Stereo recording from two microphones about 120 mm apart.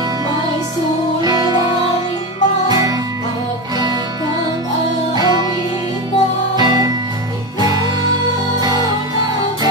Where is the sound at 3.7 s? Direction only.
35° right (ahead or behind).